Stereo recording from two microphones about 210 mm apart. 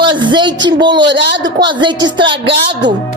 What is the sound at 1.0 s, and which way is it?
Speech, 60° right (ahead or behind).